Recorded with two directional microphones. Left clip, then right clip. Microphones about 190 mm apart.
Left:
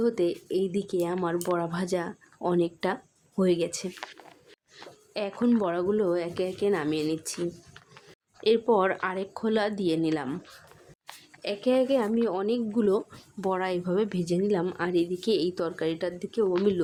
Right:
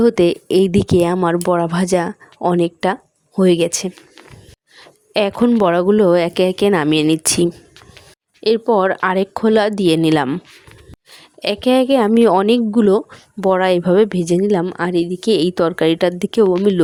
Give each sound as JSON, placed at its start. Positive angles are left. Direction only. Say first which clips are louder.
{"t": 0.0, "sound": "speech", "louder": "right 13 dB", "side_deg": -50}
{"t": 5.1, "sound": "speech", "louder": "right 12 dB", "side_deg": -45}
{"t": 8.4, "sound": "a woman's voice", "louder": "right 9 dB", "side_deg": -35}